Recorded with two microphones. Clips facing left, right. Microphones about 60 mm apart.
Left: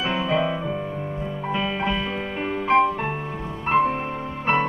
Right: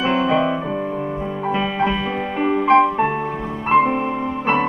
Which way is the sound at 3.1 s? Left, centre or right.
Right.